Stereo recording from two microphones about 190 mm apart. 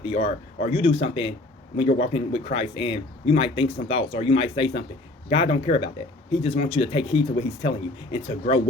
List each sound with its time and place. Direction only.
0.0 s a man's voice: 30° left (ahead or behind)